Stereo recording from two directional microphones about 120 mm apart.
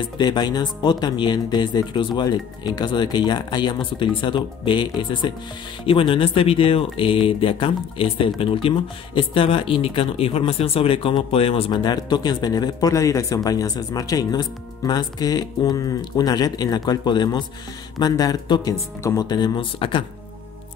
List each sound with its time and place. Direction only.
0.2 s speech: 35° left (ahead or behind)
11.7 s speech: 35° left (ahead or behind)